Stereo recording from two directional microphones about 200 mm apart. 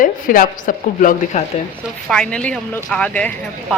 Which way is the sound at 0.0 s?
45° left (ahead or behind).